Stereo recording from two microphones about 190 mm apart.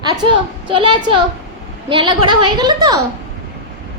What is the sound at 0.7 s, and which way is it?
A woman's voice, 25° right (ahead or behind).